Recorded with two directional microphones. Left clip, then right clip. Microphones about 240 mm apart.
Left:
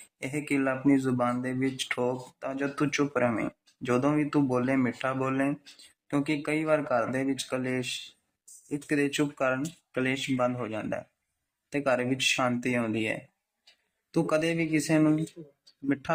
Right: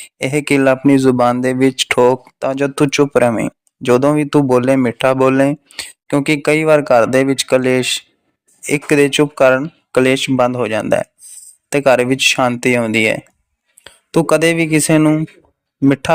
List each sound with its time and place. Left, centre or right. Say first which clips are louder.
0.2 s speech: right 16 dB; right